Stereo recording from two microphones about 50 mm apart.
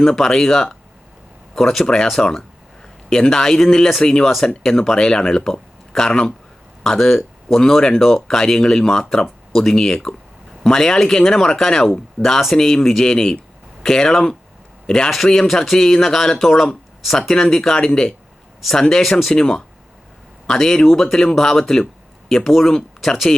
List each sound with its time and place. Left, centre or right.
0.0 s a man's voice: centre
23.0 s speech: centre